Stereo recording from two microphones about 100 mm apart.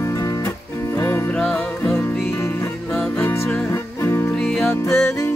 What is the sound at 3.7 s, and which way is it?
Music, 30° left (ahead or behind).